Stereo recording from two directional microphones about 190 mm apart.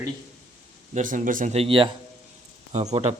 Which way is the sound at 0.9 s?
45° right (ahead or behind).